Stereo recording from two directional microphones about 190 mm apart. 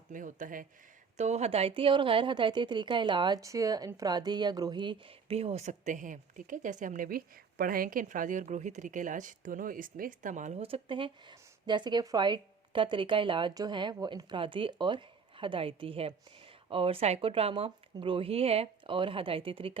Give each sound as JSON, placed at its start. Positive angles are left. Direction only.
{"t": 0.1, "sound": "a woman's voice", "side_deg": -45}